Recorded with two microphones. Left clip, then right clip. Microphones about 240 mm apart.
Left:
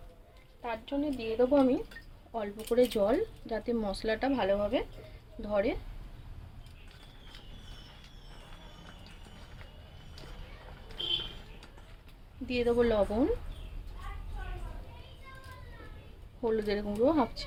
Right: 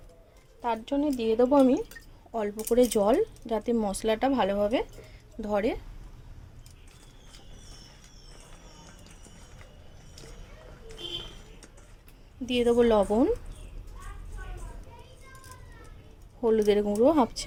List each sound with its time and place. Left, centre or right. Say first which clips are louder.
0.6 s speech: right 6 dB; right
12.5 s speech: right 5 dB; right
16.4 s speech: right 8 dB; right